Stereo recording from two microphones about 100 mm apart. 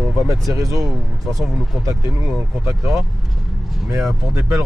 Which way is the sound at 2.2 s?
Centre (ahead or behind).